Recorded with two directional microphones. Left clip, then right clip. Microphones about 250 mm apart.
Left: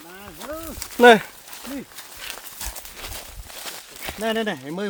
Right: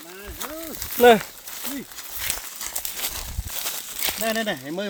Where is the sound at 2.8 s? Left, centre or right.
Right.